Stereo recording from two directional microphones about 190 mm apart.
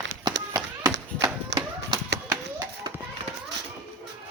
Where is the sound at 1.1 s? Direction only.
20° right (ahead or behind).